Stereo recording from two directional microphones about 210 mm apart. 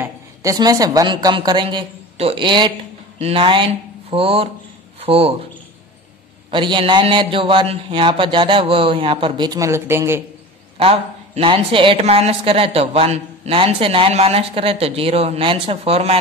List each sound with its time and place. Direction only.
0.0 s a woman's voice: 15° right (ahead or behind)
6.5 s a woman's voice: 20° right (ahead or behind)
10.8 s a woman's voice: 25° right (ahead or behind)